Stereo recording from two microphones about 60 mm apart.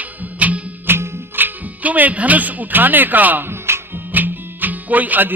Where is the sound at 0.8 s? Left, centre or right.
Right.